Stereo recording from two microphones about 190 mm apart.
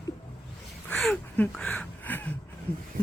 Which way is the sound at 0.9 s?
5° left (ahead or behind).